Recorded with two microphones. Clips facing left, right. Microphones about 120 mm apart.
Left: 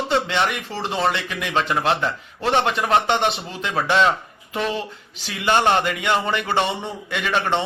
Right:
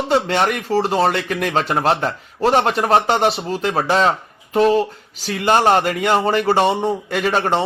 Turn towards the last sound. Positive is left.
turn(degrees=-40)  # may be behind; listen again after turning